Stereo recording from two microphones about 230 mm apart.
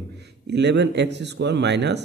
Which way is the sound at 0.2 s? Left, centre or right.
Right.